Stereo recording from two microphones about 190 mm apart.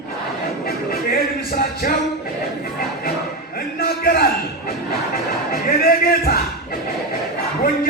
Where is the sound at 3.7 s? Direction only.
50° left (ahead or behind).